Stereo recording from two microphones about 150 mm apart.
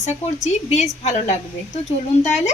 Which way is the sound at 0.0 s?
50° left (ahead or behind).